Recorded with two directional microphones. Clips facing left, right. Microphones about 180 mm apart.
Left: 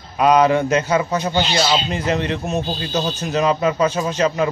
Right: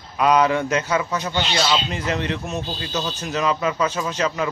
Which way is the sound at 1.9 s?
25° left (ahead or behind).